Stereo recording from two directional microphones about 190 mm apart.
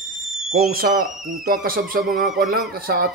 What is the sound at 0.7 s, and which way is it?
Speech, 50° right (ahead or behind).